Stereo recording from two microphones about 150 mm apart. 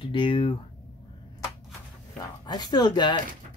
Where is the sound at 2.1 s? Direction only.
30° left (ahead or behind).